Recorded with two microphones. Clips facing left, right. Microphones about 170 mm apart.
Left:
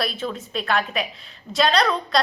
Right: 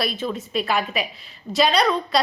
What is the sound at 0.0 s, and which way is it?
A woman's voice, 5° right (ahead or behind).